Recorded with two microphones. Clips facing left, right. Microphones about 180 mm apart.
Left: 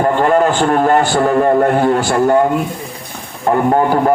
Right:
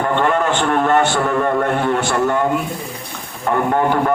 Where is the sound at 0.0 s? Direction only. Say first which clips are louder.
Left 5 dB; 35° left (ahead or behind).